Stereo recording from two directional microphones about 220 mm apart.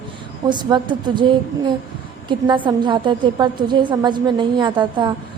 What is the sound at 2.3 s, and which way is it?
A woman's voice, 20° right (ahead or behind).